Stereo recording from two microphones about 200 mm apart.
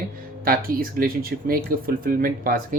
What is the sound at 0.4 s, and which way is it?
Speech, 45° right (ahead or behind).